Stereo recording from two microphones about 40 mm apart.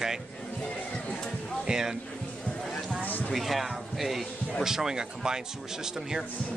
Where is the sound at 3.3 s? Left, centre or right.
Centre.